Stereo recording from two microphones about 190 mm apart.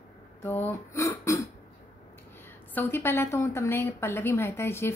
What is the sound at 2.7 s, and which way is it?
A woman's voice, 10° left (ahead or behind).